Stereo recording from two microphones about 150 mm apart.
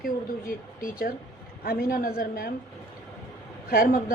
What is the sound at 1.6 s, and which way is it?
Speech, 75° left (ahead or behind).